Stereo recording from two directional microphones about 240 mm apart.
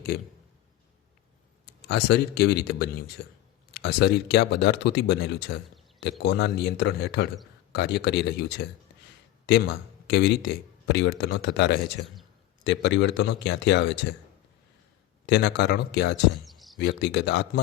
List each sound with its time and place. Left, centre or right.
0.1 s a man's voice: left
1.9 s a man's voice: left
15.3 s speech: left
16.4 s chirp: centre
16.8 s speech: left